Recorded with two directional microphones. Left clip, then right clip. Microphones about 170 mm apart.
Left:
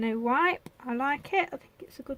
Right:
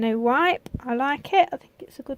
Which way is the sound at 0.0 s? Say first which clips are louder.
Right 5 dB; 45° right (ahead or behind).